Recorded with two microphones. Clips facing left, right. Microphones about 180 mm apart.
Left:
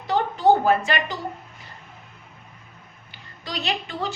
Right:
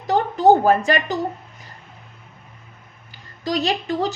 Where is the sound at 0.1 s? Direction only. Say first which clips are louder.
Right 4 dB; 45° right (ahead or behind).